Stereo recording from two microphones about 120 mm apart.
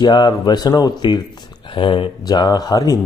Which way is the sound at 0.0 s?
35° left (ahead or behind).